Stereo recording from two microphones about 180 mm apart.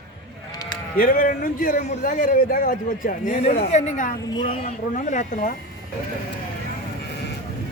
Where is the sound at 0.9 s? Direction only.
55° left (ahead or behind).